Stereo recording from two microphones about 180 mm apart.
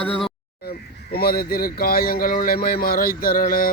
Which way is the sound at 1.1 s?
55° left (ahead or behind).